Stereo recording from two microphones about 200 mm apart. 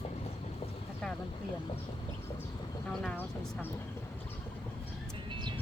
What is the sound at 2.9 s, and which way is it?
Speech, 5° left (ahead or behind).